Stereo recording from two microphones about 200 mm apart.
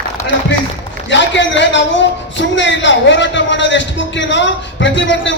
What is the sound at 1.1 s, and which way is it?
Speech, 65° left (ahead or behind).